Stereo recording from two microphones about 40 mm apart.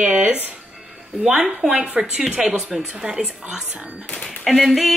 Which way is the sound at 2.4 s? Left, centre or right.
Centre.